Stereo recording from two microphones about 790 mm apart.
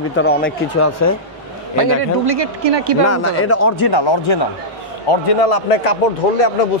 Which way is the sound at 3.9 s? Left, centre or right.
Left.